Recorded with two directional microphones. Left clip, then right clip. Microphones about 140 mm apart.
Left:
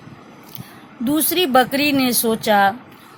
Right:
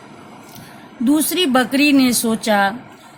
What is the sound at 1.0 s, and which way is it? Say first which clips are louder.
Speech: right 2 dB; 40° left (ahead or behind).